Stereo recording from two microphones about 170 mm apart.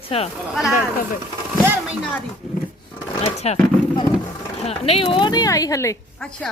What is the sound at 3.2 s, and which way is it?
Speech, 40° left (ahead or behind).